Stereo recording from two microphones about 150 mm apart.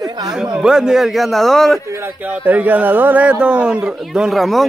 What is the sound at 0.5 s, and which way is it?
A man's voice, 5° right (ahead or behind).